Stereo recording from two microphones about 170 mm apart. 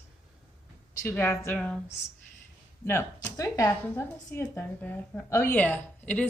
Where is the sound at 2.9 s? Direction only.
15° left (ahead or behind).